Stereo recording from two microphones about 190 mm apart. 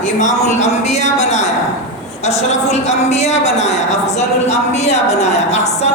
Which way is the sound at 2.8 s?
35° left (ahead or behind).